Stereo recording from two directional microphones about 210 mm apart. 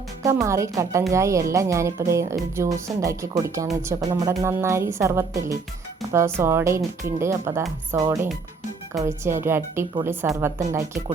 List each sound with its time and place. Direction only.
0.4 s a woman's voice: 15° right (ahead or behind)